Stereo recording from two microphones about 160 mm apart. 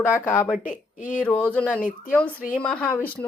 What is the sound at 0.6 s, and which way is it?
Speech, 55° left (ahead or behind).